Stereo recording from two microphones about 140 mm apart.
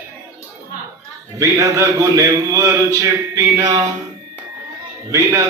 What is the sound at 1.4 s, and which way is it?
A man's voice, 20° right (ahead or behind).